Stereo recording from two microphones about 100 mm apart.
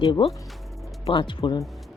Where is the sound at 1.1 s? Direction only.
60° left (ahead or behind).